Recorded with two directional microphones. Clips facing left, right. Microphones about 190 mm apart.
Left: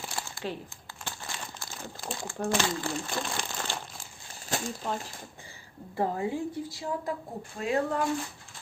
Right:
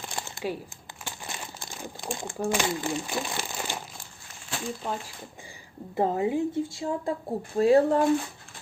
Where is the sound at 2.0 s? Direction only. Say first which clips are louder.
Right 2 dB; 20° right (ahead or behind).